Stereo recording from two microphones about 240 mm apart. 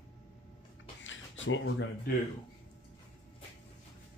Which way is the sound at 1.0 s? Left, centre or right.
Left.